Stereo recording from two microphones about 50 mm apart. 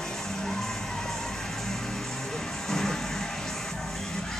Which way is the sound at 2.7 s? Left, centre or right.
Centre.